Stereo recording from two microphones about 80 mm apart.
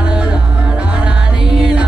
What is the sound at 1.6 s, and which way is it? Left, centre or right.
Music, centre.